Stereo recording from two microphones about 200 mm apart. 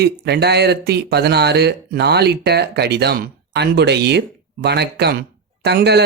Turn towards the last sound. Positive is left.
turn(degrees=-55)  # may be behind; listen again after turning